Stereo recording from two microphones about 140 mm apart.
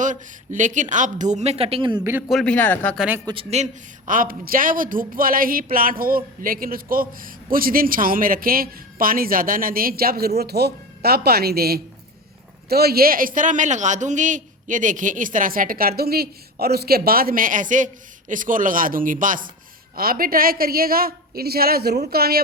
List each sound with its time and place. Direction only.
0.0 s speech: 65° right (ahead or behind); by 2.0 s 35° right (ahead or behind)
2.3 s a man's voice: 5° left (ahead or behind)
3.5 s a man's voice: 60° right (ahead or behind)
20.0 s a man's voice: 90° right